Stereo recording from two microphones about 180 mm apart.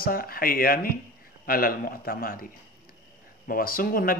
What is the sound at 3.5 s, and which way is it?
Speech, 55° left (ahead or behind).